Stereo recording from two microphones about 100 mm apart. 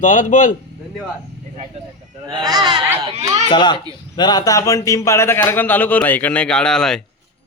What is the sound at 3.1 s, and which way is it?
Speech, 80° right.